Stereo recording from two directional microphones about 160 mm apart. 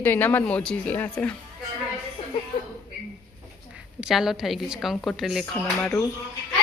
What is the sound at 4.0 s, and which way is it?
Speech, centre (ahead or behind).